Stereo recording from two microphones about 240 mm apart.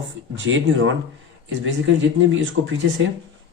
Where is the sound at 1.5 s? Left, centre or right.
Right.